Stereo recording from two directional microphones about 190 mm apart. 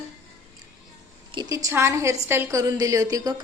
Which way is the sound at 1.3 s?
15° right (ahead or behind).